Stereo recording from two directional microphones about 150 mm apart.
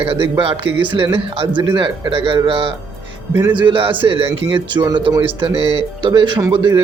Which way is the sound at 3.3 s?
15° right (ahead or behind).